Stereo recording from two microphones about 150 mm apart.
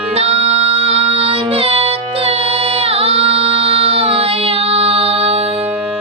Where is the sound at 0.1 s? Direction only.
40° right (ahead or behind).